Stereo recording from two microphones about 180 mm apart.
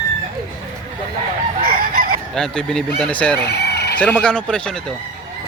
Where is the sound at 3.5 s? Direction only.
65° left (ahead or behind).